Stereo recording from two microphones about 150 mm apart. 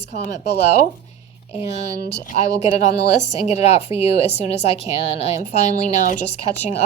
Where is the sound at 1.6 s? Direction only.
45° left (ahead or behind).